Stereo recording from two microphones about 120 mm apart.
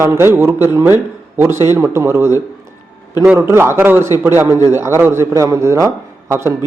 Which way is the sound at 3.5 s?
20° right (ahead or behind).